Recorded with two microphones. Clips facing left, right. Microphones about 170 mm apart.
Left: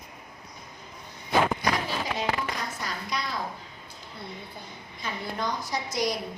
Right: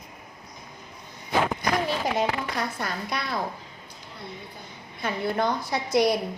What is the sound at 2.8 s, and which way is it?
Speech, 60° right (ahead or behind).